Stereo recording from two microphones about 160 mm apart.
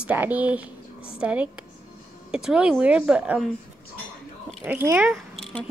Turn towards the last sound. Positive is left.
turn(degrees=0)  # may be behind; listen again after turning